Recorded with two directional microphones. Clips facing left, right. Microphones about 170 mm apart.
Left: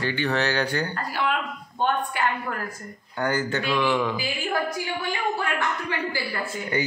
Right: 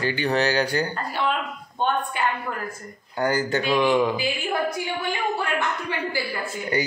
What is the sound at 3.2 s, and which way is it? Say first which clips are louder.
Speech: right 2 dB; 35° right (ahead or behind).